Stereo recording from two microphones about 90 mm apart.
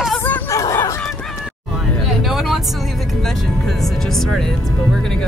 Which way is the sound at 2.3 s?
5° right (ahead or behind).